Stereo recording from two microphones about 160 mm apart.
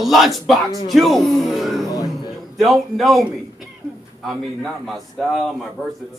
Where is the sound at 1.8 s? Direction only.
20° left (ahead or behind).